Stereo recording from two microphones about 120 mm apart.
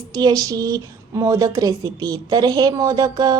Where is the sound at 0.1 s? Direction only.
35° right (ahead or behind).